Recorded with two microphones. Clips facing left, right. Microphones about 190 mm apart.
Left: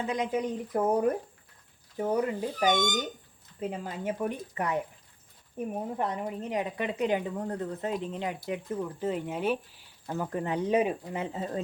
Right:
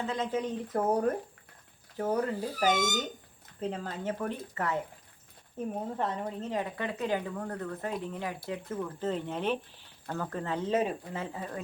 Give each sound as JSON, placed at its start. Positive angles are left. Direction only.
{"t": 0.0, "sound": "speech", "side_deg": 15}
{"t": 2.6, "sound": "speech", "side_deg": -5}
{"t": 3.6, "sound": "speech", "side_deg": 10}